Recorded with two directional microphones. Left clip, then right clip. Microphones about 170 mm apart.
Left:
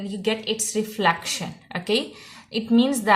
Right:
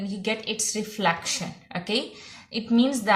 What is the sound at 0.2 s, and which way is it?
A woman's voice, 45° left (ahead or behind).